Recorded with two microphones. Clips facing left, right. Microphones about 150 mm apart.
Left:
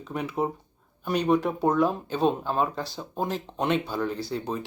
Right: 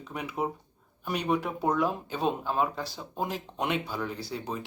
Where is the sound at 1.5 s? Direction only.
35° left (ahead or behind).